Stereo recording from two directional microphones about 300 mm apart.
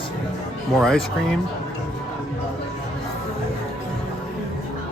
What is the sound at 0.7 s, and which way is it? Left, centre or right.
Speech, centre.